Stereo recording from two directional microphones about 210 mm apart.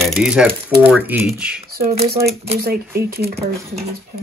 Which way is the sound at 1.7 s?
45° right (ahead or behind).